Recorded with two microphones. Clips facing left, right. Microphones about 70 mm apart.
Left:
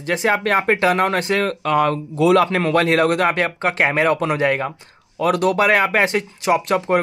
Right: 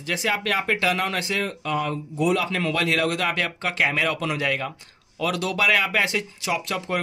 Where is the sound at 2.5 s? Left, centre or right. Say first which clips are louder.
Left 7 dB; left.